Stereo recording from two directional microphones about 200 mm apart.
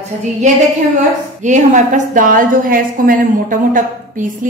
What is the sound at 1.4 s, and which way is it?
A woman's voice, 40° right (ahead or behind).